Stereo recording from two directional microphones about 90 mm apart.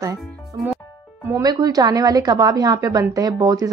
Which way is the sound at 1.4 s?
45° right (ahead or behind).